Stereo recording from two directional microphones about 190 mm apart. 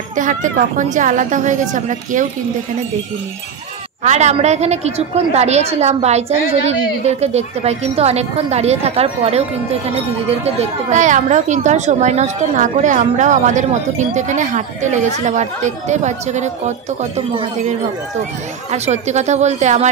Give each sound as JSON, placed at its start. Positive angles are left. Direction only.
{"t": 0.1, "sound": "speech", "side_deg": -40}
{"t": 4.0, "sound": "speech", "side_deg": -35}
{"t": 10.4, "sound": "speech", "side_deg": -35}